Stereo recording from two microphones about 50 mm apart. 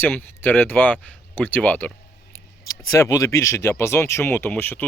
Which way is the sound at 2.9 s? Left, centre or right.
Left.